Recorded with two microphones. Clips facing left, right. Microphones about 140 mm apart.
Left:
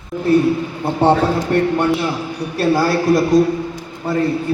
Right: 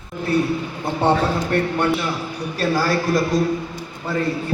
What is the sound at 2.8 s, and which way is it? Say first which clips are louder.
Speech: left 4 dB; 15° left (ahead or behind).